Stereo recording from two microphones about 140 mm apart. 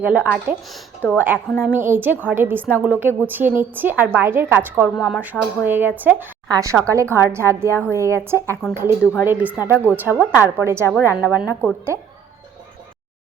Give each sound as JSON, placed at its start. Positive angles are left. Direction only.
{"t": 0.0, "sound": "a woman's voice", "side_deg": -10}
{"t": 1.0, "sound": "a woman's voice", "side_deg": 15}
{"t": 1.6, "sound": "a woman's voice", "side_deg": -15}
{"t": 4.9, "sound": "speech", "side_deg": 0}
{"t": 5.2, "sound": "a woman's voice", "side_deg": -15}
{"t": 7.7, "sound": "a woman's voice", "side_deg": 15}
{"t": 7.9, "sound": "a woman's voice", "side_deg": -20}